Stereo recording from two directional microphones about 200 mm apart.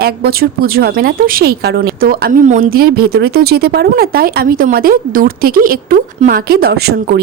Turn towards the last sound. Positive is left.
turn(degrees=-55)  # may be behind; listen again after turning